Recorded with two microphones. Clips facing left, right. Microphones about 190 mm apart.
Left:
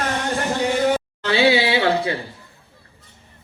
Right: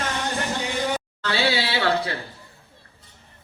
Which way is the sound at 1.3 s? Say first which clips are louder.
Left 7 dB; 20° left (ahead or behind).